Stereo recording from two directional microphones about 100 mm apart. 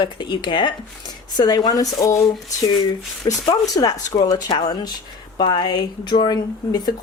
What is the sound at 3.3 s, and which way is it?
Speech, 40° left (ahead or behind).